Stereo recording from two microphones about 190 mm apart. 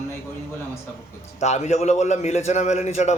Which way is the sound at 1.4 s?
35° left (ahead or behind).